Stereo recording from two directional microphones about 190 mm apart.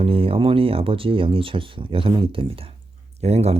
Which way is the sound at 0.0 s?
30° right (ahead or behind).